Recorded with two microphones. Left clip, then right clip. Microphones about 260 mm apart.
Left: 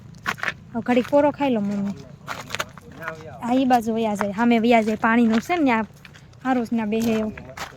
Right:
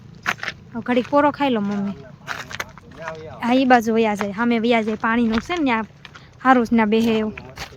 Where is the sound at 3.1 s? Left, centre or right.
Centre.